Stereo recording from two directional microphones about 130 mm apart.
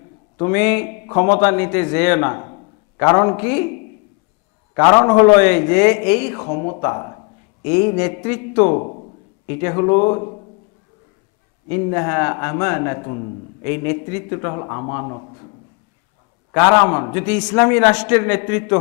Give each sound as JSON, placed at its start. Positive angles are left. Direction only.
{"t": 0.3, "sound": "a man's voice", "side_deg": 20}
{"t": 4.7, "sound": "a man's voice", "side_deg": 30}
{"t": 9.5, "sound": "a man's voice", "side_deg": 20}
{"t": 11.7, "sound": "a man's voice", "side_deg": 25}
{"t": 16.5, "sound": "a man's voice", "side_deg": 25}